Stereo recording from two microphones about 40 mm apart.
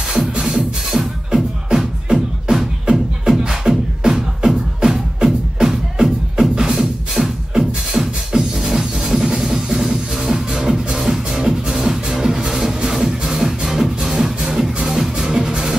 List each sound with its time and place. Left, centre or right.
0.3 s music: right
0.9 s music: centre
15.2 s music: right